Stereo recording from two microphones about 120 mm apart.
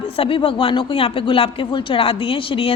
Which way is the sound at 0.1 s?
50° left (ahead or behind).